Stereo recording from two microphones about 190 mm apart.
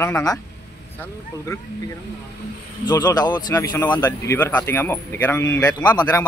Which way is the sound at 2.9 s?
20° left (ahead or behind).